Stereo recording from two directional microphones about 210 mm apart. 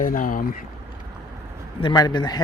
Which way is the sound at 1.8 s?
20° left (ahead or behind).